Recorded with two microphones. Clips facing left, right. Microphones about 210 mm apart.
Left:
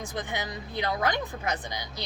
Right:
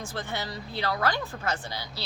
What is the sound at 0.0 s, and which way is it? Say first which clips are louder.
A woman's voice: left 1 dB; 15° left (ahead or behind).